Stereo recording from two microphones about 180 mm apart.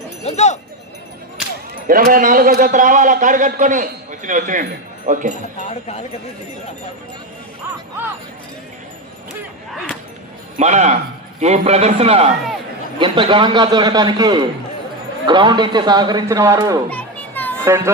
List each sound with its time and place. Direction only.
0.3 s speech: 40° left (ahead or behind)
1.9 s a man's voice: 50° right (ahead or behind)
5.5 s speech: 35° left (ahead or behind)
10.6 s a man's voice: 40° right (ahead or behind); by 16.8 s 20° right (ahead or behind)
16.9 s children playing: 10° left (ahead or behind)
17.7 s speech: 15° right (ahead or behind)